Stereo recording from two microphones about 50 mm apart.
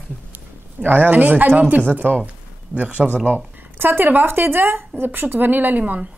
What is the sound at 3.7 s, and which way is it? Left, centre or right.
Speech, right.